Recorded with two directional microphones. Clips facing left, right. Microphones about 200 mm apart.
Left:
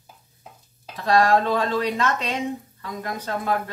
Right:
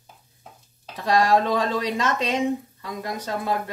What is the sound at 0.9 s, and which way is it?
Speech, 15° right (ahead or behind).